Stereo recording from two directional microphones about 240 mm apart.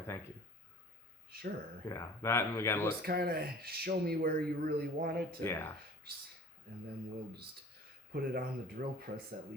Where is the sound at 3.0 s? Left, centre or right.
Right.